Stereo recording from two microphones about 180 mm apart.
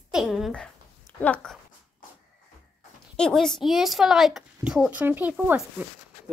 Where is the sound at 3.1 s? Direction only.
5° left (ahead or behind).